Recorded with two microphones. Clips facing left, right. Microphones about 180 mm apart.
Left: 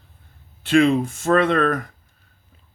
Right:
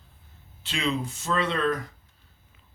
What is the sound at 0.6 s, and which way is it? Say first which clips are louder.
Speech: left 13 dB; 55° left (ahead or behind).